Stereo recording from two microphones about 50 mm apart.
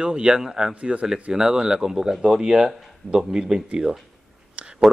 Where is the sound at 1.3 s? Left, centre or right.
Centre.